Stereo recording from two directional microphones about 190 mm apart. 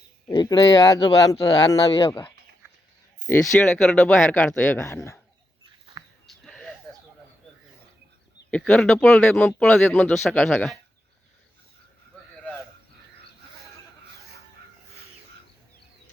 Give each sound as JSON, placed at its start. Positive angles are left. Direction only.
{"t": 0.3, "sound": "speech", "side_deg": 20}
{"t": 3.2, "sound": "speech", "side_deg": 10}
{"t": 6.2, "sound": "a sound", "side_deg": 0}
{"t": 8.4, "sound": "speech", "side_deg": 5}